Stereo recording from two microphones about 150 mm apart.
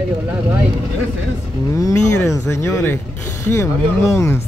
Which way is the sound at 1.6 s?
20° left (ahead or behind).